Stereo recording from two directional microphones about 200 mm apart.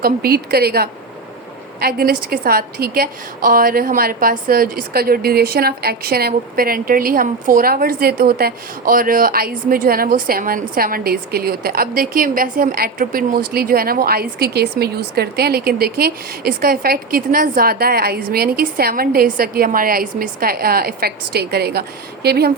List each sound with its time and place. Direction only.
0.0 s a woman's voice: 50° right (ahead or behind)